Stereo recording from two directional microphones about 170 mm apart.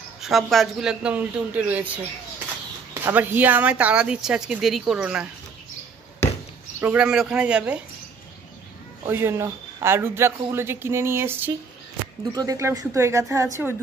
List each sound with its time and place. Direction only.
0.2 s a man's voice: centre (ahead or behind)
2.9 s a man's voice: 10° right (ahead or behind)
6.8 s a man's voice: 10° right (ahead or behind)
9.0 s a man's voice: 15° right (ahead or behind)